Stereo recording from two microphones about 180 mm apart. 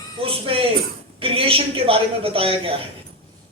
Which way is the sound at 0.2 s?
30° right (ahead or behind).